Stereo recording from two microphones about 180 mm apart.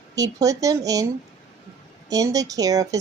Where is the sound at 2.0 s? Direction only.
20° right (ahead or behind).